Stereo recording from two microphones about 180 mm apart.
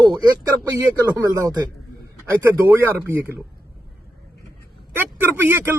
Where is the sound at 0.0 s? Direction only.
20° right (ahead or behind).